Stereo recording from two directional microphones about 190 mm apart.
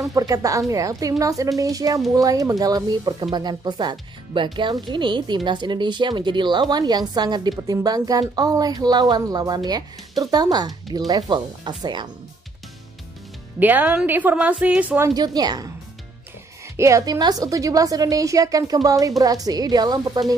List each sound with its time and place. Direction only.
0.1 s a woman's voice: 20° right (ahead or behind)
13.6 s a woman's voice: 10° right (ahead or behind)
16.7 s a woman's voice: 15° right (ahead or behind)